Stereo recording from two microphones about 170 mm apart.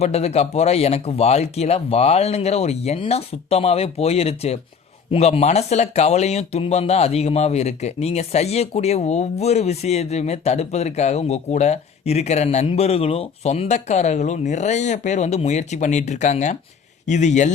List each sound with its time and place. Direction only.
0.0 s speech: 35° left (ahead or behind)